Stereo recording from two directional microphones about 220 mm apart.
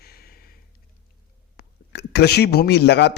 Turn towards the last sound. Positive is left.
turn(degrees=50)  # may be behind; listen again after turning